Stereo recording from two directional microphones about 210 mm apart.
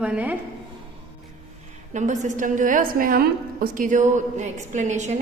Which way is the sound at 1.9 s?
35° right (ahead or behind).